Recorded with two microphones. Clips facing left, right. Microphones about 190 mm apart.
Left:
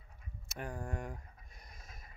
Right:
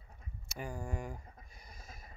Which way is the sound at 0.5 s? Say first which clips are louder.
Even; centre (ahead or behind).